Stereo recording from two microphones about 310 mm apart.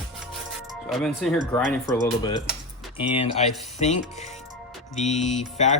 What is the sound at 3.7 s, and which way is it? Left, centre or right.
Music, left.